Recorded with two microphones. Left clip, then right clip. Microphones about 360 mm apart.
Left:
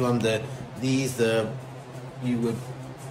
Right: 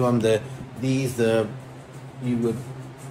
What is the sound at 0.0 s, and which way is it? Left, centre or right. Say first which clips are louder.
A man's voice: right 4 dB; centre.